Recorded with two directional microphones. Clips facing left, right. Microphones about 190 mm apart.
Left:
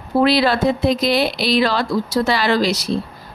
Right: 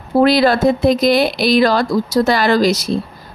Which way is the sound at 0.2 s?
45° right (ahead or behind).